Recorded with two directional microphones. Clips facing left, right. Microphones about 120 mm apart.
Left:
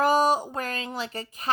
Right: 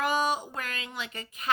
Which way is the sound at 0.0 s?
40° left (ahead or behind).